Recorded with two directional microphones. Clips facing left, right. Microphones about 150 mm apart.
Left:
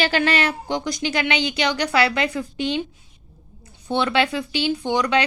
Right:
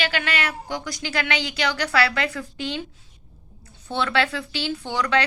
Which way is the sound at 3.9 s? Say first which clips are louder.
Left 3 dB; 20° left (ahead or behind).